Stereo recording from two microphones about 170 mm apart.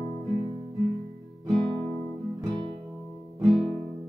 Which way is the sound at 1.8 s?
20° left (ahead or behind).